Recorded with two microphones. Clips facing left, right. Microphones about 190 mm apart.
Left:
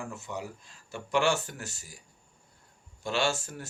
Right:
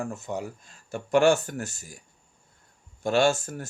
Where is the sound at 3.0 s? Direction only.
50° right (ahead or behind).